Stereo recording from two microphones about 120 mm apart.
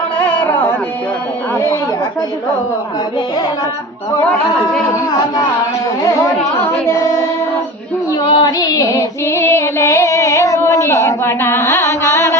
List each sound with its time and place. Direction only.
6.8 s child singing: 20° left (ahead or behind)
8.3 s female singing: 35° left (ahead or behind)